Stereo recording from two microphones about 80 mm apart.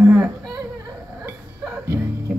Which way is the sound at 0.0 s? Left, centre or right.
Right.